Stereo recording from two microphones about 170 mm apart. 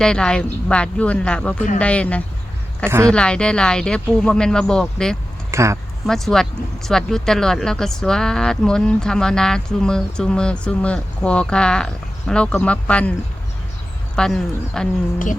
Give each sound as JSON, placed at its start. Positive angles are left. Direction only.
{"t": 0.0, "sound": "speech", "side_deg": 5}
{"t": 2.8, "sound": "speech", "side_deg": -15}
{"t": 3.1, "sound": "speech", "side_deg": 5}
{"t": 5.5, "sound": "a sound", "side_deg": -15}
{"t": 6.1, "sound": "speech", "side_deg": 0}
{"t": 14.2, "sound": "speech", "side_deg": 5}